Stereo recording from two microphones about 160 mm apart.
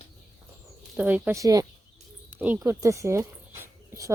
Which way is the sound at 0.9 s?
10° right (ahead or behind).